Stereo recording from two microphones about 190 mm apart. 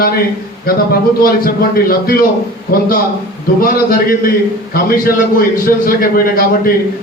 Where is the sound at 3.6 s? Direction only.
50° left (ahead or behind).